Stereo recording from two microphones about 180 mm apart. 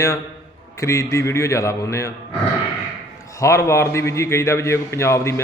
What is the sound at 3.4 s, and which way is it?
A man's voice, 15° left (ahead or behind).